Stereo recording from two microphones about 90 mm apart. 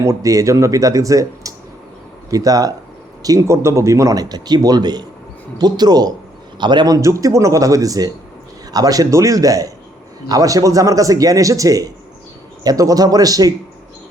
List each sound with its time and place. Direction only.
0.0 s a man's voice: 35° right (ahead or behind); by 6.9 s 55° right (ahead or behind)
6.9 s a man's voice: 35° right (ahead or behind)